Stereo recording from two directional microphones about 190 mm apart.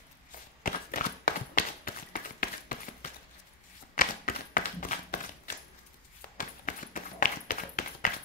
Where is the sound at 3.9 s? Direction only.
45° left (ahead or behind).